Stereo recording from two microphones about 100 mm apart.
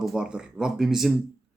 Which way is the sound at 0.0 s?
5° right (ahead or behind).